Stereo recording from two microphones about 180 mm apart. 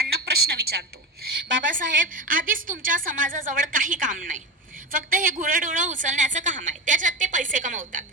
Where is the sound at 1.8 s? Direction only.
50° right (ahead or behind).